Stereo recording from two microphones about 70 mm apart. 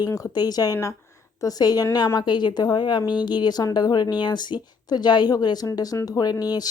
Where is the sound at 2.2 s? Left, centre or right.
Left.